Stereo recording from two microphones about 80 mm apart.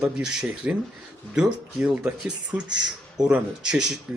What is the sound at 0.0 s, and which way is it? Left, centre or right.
Speech, centre.